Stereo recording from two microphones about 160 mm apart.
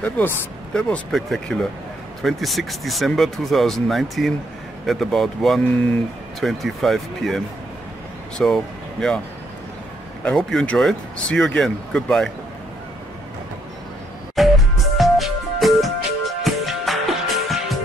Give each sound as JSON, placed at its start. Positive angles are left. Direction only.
{"t": 0.0, "sound": "speech", "side_deg": 10}
{"t": 10.2, "sound": "speech", "side_deg": 5}
{"t": 14.4, "sound": "music", "side_deg": 0}